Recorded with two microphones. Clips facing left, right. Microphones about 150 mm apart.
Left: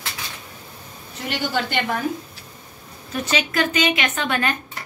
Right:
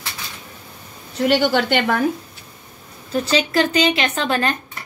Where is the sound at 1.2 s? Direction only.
75° right (ahead or behind).